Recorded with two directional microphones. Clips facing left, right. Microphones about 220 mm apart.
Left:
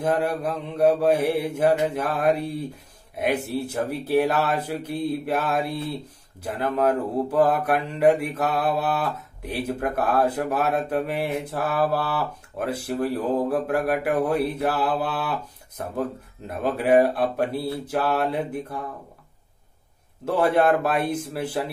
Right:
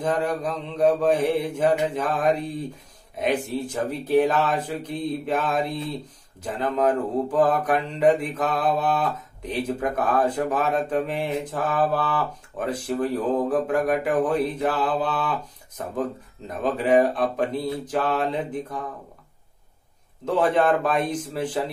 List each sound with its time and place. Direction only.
0.0 s mantra: 10° left (ahead or behind)
16.4 s mantra: 10° left (ahead or behind)
20.2 s mantra: 10° left (ahead or behind)